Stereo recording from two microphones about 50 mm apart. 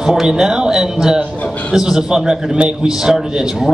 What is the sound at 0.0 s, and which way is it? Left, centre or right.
A man's voice, centre.